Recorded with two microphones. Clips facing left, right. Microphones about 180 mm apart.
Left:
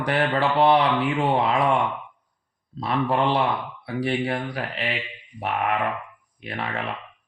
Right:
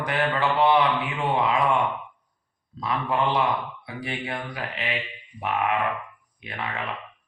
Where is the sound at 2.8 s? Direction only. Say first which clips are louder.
Left 3 dB; 30° left (ahead or behind).